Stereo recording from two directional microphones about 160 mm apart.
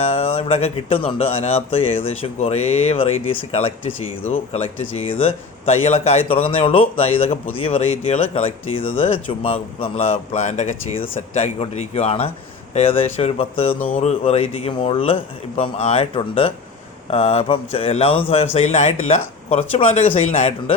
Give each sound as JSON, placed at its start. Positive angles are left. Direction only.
{"t": 0.0, "sound": "speech", "side_deg": 40}